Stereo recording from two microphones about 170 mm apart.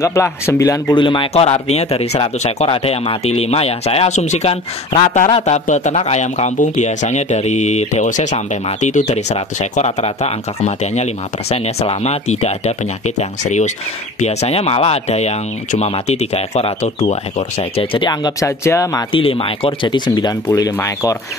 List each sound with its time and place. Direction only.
0.0 s a man's voice: 15° left (ahead or behind)
19.1 s speech: 30° left (ahead or behind); by 21.2 s 15° left (ahead or behind)